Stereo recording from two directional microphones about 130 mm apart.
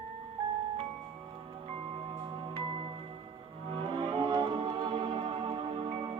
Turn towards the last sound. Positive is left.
turn(degrees=-45)  # may be behind; listen again after turning